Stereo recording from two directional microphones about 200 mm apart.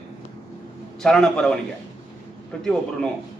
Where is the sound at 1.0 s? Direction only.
5° left (ahead or behind).